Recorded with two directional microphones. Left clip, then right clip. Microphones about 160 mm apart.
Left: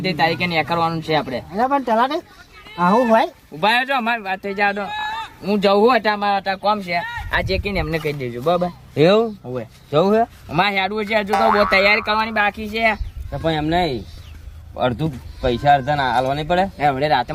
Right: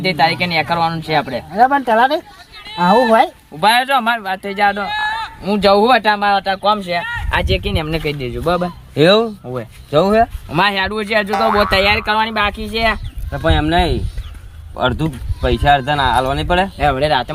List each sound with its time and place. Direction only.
0.0 s speech: 5° right (ahead or behind)
1.5 s speech: 25° right (ahead or behind)
3.6 s speech: 5° right (ahead or behind)
4.9 s a sound: 20° right (ahead or behind)
5.4 s speech: 10° right (ahead or behind)
7.3 s speech: 15° right (ahead or behind)
9.0 s speech: 5° left (ahead or behind)
10.5 s speech: 20° right (ahead or behind)
11.3 s speech: centre (ahead or behind)
11.6 s speech: 20° right (ahead or behind)
13.3 s speech: 5° left (ahead or behind)
16.7 s speech: 10° right (ahead or behind)